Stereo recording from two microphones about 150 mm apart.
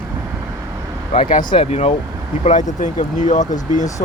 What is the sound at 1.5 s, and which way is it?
Speech, 40° left (ahead or behind).